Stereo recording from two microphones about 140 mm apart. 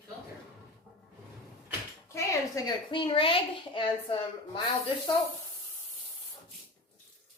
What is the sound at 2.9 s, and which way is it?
A child's voice, 40° left (ahead or behind).